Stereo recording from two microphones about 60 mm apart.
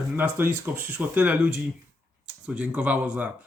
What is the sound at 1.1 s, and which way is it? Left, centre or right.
Speech, right.